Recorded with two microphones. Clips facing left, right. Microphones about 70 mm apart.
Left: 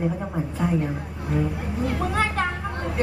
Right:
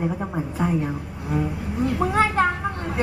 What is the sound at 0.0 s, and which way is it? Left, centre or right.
Speech, centre.